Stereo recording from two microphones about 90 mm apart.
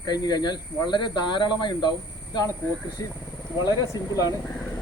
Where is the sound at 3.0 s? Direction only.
45° left (ahead or behind).